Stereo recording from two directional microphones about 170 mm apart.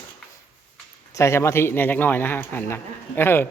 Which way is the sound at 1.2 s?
15° left (ahead or behind).